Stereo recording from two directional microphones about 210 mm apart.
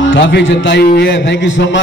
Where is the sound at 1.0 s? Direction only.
60° left (ahead or behind).